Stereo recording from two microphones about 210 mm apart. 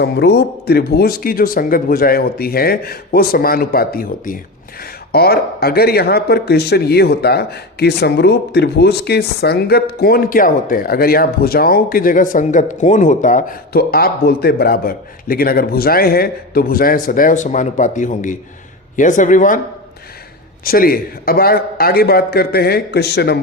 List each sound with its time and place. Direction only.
0.0 s a man's voice: 50° left (ahead or behind)
20.7 s a man's voice: 45° left (ahead or behind)